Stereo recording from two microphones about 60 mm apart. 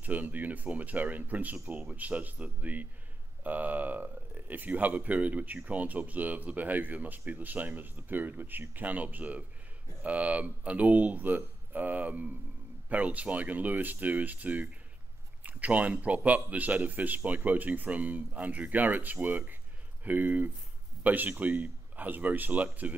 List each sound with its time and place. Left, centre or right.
0.0 s speech: right